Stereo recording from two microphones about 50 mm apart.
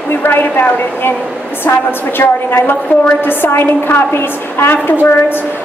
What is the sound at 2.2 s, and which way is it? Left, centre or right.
A woman's voice, left.